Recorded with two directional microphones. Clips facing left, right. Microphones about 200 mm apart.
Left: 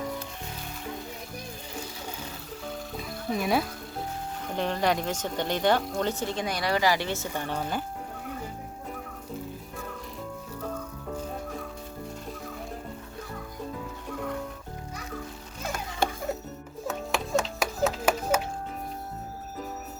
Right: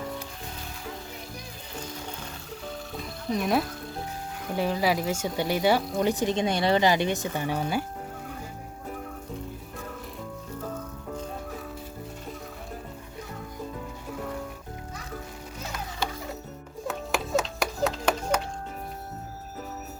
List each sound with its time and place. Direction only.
3.0 s music: 5° left (ahead or behind)
4.5 s speech: 5° right (ahead or behind)
16.0 s music: 50° left (ahead or behind)
16.8 s music: centre (ahead or behind)